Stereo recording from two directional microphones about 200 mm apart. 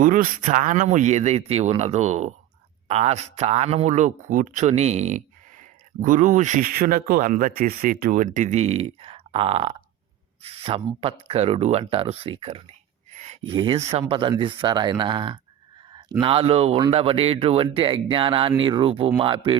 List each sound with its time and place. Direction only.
0.0 s speech: 40° right (ahead or behind); by 15.4 s 25° right (ahead or behind)
15.9 s a sound: 20° right (ahead or behind)
16.2 s speech: 30° right (ahead or behind)